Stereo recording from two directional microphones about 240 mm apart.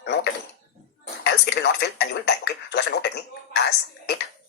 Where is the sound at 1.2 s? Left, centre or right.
Left.